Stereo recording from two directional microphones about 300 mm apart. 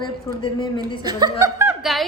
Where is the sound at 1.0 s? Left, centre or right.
Centre.